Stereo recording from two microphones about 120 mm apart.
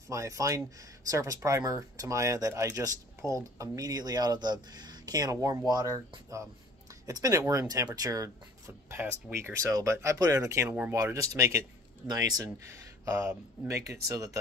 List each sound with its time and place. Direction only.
0.1 s speech: 25° right (ahead or behind)